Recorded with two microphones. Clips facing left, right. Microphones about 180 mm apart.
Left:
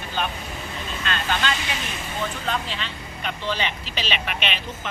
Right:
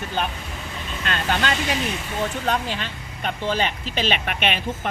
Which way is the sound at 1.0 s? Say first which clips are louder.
Right 2 dB; 55° right (ahead or behind).